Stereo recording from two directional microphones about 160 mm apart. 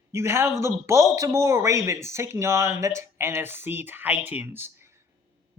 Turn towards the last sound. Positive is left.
turn(degrees=-15)  # may be behind; listen again after turning